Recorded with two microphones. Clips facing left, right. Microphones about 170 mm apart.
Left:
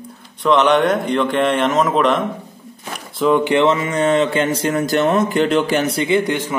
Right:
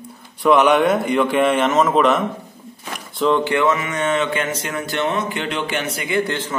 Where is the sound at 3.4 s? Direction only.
20° left (ahead or behind).